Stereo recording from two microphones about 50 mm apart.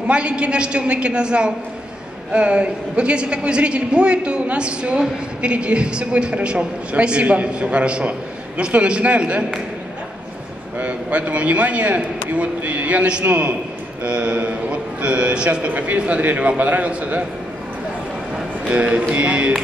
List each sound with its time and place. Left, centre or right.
0.0 s a woman's voice: right
10.8 s a woman's voice: right
15.7 s a man's voice: right
18.7 s a woman's voice: right